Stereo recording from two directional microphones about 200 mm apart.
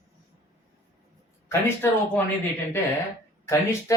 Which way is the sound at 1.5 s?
10° left (ahead or behind).